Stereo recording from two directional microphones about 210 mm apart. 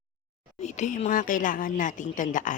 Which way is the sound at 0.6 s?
35° left (ahead or behind).